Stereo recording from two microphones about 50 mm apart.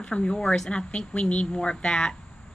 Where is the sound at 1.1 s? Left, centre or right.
Left.